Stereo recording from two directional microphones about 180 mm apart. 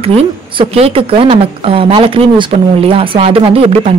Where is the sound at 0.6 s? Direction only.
30° right (ahead or behind).